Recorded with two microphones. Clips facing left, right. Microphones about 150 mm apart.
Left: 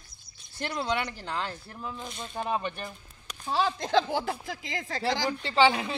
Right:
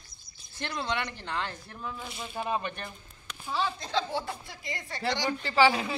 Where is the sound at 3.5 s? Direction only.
45° left (ahead or behind).